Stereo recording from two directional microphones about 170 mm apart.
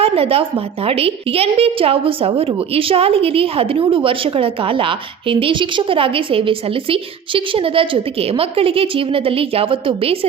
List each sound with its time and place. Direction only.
0.0 s a woman's voice: 35° right (ahead or behind)